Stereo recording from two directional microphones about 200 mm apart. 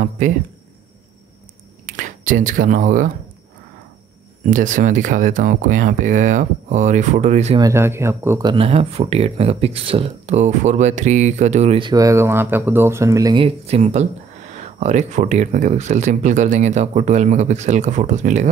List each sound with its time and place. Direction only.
2.0 s speech: 40° right (ahead or behind)
4.5 s speech: 40° right (ahead or behind)
7.5 s speech: 15° right (ahead or behind); by 18.5 s 35° right (ahead or behind)